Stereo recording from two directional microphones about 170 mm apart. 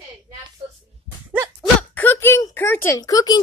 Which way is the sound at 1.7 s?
10° left (ahead or behind).